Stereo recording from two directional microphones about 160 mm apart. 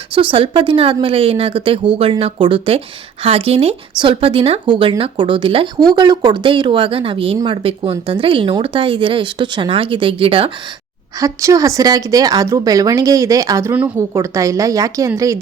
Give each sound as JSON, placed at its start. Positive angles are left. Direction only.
{"t": 0.1, "sound": "speech", "side_deg": -35}
{"t": 11.2, "sound": "a woman's voice", "side_deg": -20}